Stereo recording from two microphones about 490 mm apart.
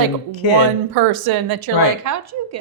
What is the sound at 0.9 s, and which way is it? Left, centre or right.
A woman's voice, right.